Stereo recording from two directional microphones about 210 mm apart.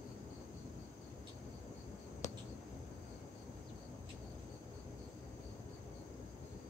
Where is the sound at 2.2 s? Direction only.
15° left (ahead or behind).